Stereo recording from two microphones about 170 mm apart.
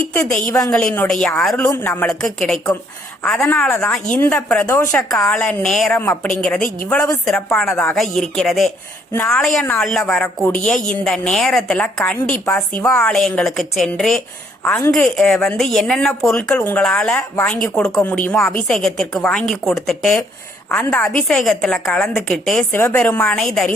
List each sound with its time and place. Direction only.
0.1 s a woman's voice: 5° left (ahead or behind)
6.6 s a woman's voice: 50° left (ahead or behind)
7.3 s a woman's voice: 5° left (ahead or behind)